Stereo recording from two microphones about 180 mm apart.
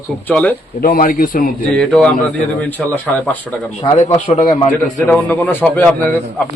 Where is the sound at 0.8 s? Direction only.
55° left (ahead or behind).